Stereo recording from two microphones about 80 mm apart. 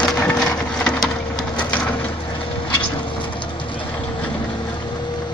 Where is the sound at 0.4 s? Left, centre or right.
Centre.